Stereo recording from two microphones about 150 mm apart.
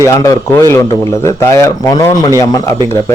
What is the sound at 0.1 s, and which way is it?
A man's voice, 20° left (ahead or behind).